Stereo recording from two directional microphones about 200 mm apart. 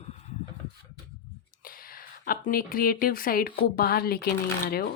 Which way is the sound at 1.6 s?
45° left (ahead or behind).